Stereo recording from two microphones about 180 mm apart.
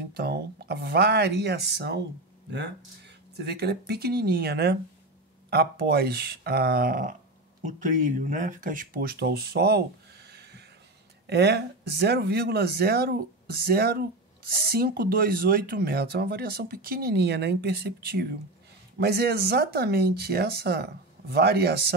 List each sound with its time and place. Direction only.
0.1 s speech: 60° right (ahead or behind)
3.3 s speech: 65° right (ahead or behind)